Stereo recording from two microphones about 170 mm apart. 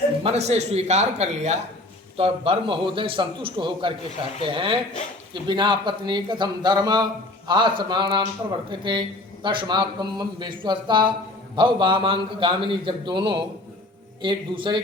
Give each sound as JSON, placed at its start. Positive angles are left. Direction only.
{"t": 0.2, "sound": "a man's voice", "side_deg": -40}